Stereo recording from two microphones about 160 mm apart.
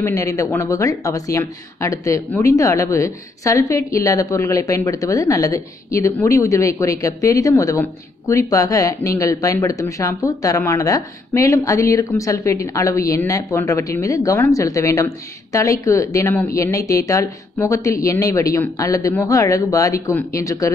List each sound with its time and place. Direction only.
0.0 s speech: 20° left (ahead or behind)